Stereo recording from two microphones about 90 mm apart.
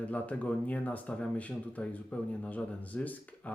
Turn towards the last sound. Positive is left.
turn(degrees=15)  # may be behind; listen again after turning